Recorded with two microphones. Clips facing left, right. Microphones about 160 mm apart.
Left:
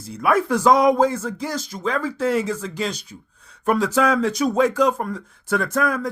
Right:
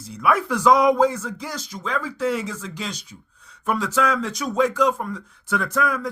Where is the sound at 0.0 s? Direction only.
50° left (ahead or behind).